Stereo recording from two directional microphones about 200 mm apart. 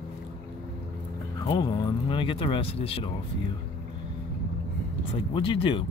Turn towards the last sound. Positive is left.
turn(degrees=25)  # may be behind; listen again after turning